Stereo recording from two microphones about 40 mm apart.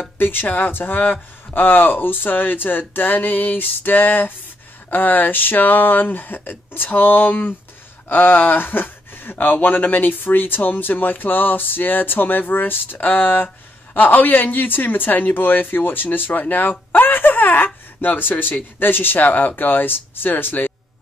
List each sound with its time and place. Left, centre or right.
0.2 s speech: left